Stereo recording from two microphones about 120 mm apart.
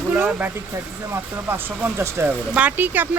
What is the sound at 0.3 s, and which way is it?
Speech, 15° right (ahead or behind).